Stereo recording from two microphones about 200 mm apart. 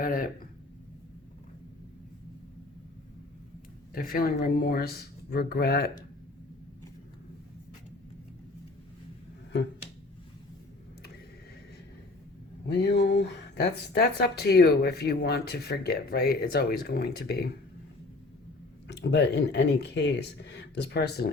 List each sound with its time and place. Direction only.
0.0 s speech: 45° left (ahead or behind)
3.9 s speech: 45° left (ahead or behind)
12.6 s speech: 55° left (ahead or behind)
18.9 s speech: 60° left (ahead or behind)